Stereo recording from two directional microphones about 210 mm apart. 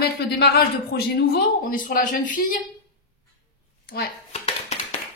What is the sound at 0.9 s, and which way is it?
A woman's voice, 45° left (ahead or behind).